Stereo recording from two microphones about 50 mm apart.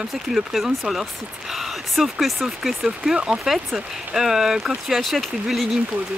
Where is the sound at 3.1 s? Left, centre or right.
Centre.